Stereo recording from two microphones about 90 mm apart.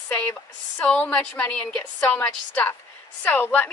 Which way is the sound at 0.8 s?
10° left (ahead or behind).